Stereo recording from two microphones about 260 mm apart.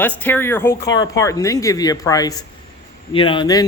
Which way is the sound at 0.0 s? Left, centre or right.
Centre.